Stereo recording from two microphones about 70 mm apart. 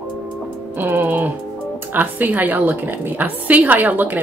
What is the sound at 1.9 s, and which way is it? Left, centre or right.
A woman's voice, right.